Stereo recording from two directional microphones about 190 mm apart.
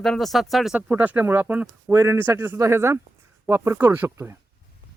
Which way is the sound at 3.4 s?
10° right (ahead or behind).